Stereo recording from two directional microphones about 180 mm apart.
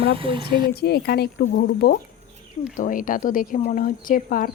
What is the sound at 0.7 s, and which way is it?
Speech, 65° left (ahead or behind).